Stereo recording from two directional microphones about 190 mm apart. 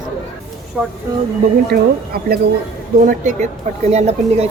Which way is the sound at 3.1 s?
40° right (ahead or behind).